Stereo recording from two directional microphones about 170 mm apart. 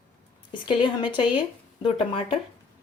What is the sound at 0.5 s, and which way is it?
Speech, 30° left (ahead or behind).